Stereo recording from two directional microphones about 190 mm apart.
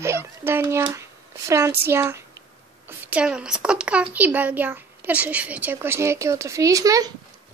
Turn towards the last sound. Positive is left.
turn(degrees=-20)  # may be behind; listen again after turning